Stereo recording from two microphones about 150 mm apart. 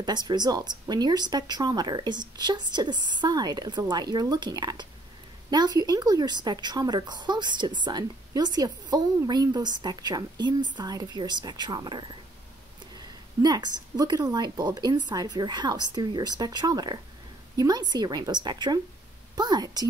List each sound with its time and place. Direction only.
0.0 s a woman's voice: 30° right (ahead or behind)
13.4 s a woman's voice: 25° right (ahead or behind)